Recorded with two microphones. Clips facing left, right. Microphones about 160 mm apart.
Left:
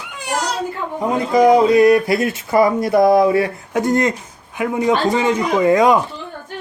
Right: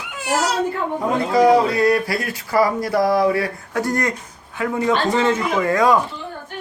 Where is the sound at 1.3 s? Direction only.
20° left (ahead or behind).